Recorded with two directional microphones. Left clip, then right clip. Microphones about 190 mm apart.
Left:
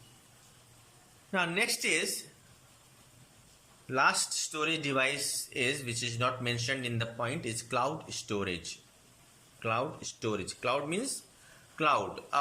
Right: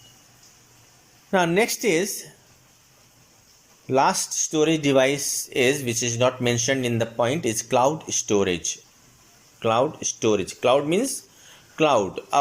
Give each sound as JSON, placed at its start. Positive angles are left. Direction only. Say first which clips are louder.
{"t": 1.3, "sound": "speech", "louder": "right 10 dB", "side_deg": -35}
{"t": 3.8, "sound": "speech", "louder": "right 7 dB", "side_deg": -35}
{"t": 8.0, "sound": "speech", "louder": "right 14 dB", "side_deg": 5}
{"t": 8.3, "sound": "speech", "louder": "right 13 dB", "side_deg": -30}